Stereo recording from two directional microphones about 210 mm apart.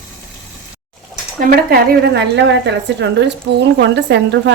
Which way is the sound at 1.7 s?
50° right (ahead or behind).